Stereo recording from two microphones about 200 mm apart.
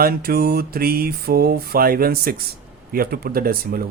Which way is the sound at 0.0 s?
50° right (ahead or behind).